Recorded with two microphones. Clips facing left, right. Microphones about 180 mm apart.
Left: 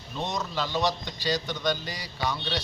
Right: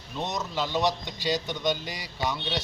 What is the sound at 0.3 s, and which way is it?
Speech, 15° right (ahead or behind).